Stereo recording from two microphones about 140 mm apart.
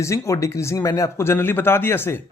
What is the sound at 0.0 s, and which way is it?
Speech, 20° left (ahead or behind).